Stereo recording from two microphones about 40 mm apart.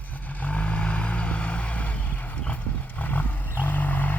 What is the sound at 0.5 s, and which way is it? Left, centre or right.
Vehicle, left.